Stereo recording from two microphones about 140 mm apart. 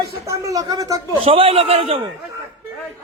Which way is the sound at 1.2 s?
40° right (ahead or behind).